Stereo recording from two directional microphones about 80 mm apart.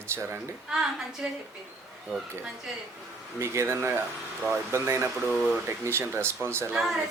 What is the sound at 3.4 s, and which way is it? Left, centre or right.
Speech, right.